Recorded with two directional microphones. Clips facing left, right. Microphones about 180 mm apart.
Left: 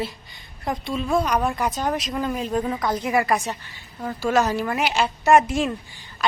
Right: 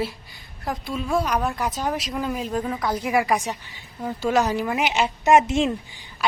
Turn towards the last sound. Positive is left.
turn(degrees=-25)  # may be behind; listen again after turning